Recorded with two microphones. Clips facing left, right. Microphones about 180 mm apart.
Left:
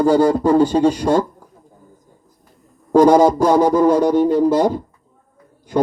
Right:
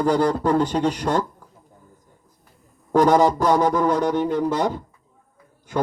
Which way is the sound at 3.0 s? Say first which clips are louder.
Left 5 dB; 10° left (ahead or behind).